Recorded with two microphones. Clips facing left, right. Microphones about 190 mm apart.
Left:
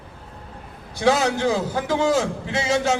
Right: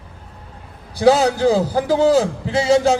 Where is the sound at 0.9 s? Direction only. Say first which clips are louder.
Right 5 dB; 35° right (ahead or behind).